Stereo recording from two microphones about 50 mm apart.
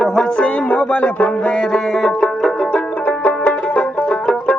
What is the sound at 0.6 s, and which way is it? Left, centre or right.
Music, left.